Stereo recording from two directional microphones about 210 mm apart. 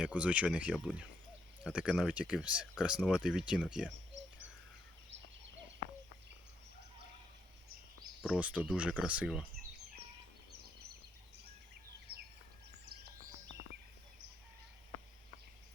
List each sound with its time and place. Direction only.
0.0 s speech: 5° right (ahead or behind)
4.1 s a sound: 60° right (ahead or behind)
8.2 s speech: 5° right (ahead or behind)